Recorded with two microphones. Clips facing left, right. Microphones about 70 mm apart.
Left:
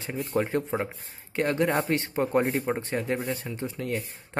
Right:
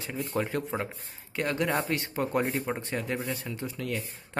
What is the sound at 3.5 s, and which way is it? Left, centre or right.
Speech, left.